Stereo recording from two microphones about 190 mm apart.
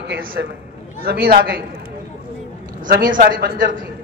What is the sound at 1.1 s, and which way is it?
Speech, 50° right (ahead or behind).